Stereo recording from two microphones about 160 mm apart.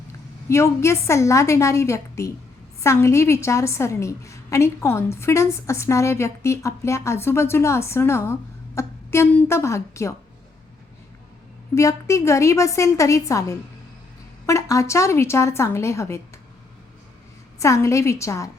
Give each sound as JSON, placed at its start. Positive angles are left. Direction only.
{"t": 0.4, "sound": "a woman's voice", "side_deg": 20}
{"t": 11.7, "sound": "a woman's voice", "side_deg": 20}
{"t": 17.6, "sound": "a woman's voice", "side_deg": 20}